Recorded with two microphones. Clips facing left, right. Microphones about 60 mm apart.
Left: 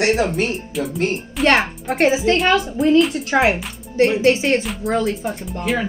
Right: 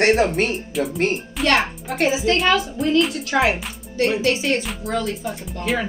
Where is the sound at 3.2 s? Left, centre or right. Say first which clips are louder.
Left 2 dB; left.